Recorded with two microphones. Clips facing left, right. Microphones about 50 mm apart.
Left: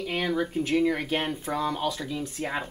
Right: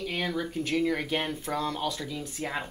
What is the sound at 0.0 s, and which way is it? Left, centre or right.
Speech, left.